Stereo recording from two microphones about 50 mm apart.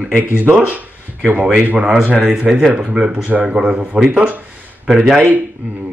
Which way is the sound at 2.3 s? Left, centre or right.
Centre.